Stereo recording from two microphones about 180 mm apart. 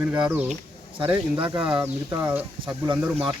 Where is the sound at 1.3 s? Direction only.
25° right (ahead or behind).